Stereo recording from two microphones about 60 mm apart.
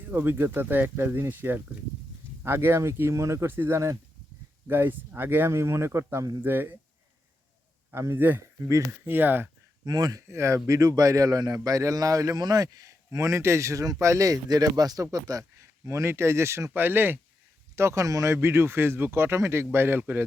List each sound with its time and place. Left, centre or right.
0.1 s a man's voice: right
3.4 s speech: right
5.5 s a man's voice: right
6.4 s speech: right
8.1 s speech: right
9.8 s speech: right
10.2 s a man's voice: right
13.1 s a man's voice: right
15.9 s a man's voice: right
16.7 s speech: right
17.7 s speech: right
18.0 s a man's voice: right
18.3 s a man's voice: right